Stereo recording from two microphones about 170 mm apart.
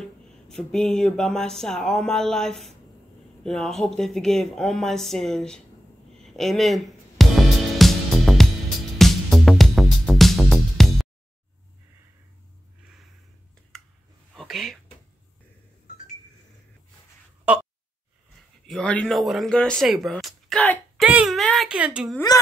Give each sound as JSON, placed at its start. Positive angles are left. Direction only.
{"t": 0.0, "sound": "speech", "side_deg": 0}
{"t": 6.1, "sound": "music", "side_deg": 0}
{"t": 14.3, "sound": "whispering", "side_deg": 0}
{"t": 17.5, "sound": "a sound", "side_deg": -10}
{"t": 18.7, "sound": "speech", "side_deg": 5}
{"t": 21.0, "sound": "a sound", "side_deg": -5}